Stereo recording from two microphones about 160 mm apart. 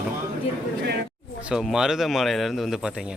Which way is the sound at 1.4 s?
5° right (ahead or behind).